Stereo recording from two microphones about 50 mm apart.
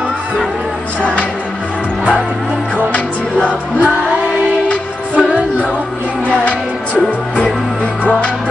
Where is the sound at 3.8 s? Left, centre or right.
Right.